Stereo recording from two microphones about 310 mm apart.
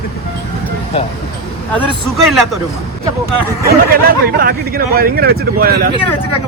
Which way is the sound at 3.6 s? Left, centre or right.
Right.